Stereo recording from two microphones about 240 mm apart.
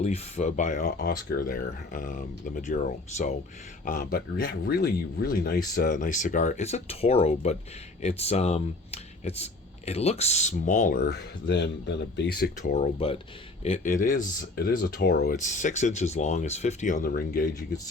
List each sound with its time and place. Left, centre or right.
0.0 s speech: left
12.7 s speech: left